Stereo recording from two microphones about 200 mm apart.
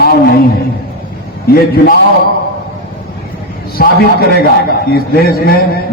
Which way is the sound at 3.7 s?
50° left (ahead or behind).